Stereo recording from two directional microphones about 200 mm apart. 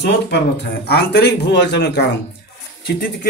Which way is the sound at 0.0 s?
60° left (ahead or behind).